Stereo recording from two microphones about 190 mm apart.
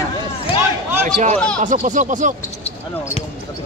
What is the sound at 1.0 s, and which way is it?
Speech, 40° right (ahead or behind).